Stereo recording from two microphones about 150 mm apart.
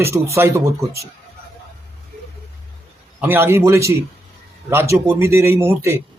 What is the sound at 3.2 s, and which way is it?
A man's voice, 15° right (ahead or behind).